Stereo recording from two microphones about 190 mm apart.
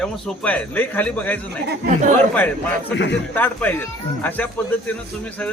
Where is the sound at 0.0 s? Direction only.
5° left (ahead or behind).